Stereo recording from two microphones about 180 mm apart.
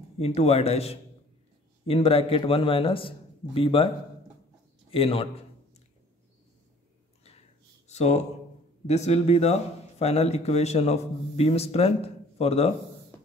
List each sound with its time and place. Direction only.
0.2 s a man's voice: 35° left (ahead or behind)
4.9 s a man's voice: 30° left (ahead or behind)
7.9 s a man's voice: 40° left (ahead or behind)
13.1 s music: 15° left (ahead or behind)